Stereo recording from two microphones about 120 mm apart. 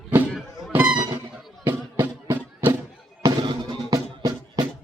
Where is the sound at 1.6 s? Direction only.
20° right (ahead or behind).